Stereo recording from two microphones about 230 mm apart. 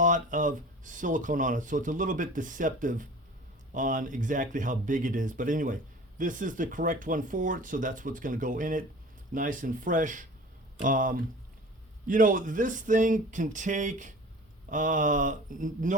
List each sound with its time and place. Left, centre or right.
0.0 s speech: right